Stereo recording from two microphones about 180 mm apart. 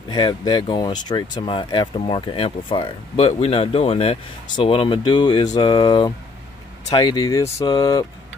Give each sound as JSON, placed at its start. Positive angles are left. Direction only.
{"t": 0.1, "sound": "speech", "side_deg": 25}